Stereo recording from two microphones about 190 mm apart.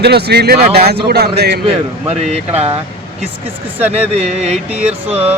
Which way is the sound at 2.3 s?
35° right (ahead or behind).